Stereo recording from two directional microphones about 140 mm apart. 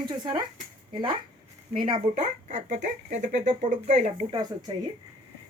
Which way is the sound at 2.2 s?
55° right (ahead or behind).